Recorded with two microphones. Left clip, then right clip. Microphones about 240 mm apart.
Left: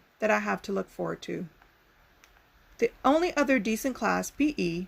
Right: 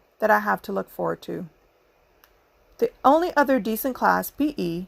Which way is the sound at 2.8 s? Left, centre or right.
Centre.